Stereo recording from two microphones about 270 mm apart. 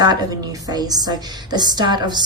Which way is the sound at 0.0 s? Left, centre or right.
Centre.